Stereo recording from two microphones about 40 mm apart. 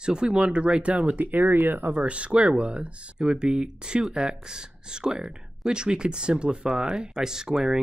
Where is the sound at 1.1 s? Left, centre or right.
Right.